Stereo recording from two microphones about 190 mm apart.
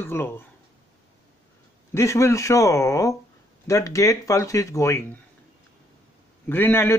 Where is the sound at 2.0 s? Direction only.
15° left (ahead or behind).